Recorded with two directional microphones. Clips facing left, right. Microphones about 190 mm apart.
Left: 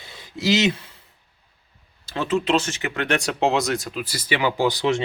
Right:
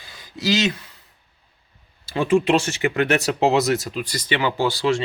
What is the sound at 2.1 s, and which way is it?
Speech, 10° right (ahead or behind).